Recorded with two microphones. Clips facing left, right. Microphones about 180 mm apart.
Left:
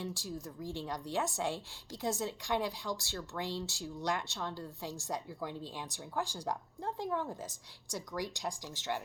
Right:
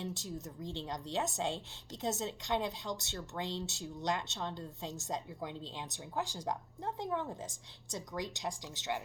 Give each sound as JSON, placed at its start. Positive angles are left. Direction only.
{"t": 0.0, "sound": "a woman's voice", "side_deg": -20}